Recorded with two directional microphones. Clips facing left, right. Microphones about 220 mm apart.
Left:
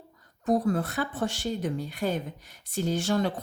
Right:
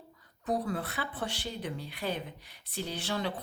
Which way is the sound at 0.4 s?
45° left (ahead or behind).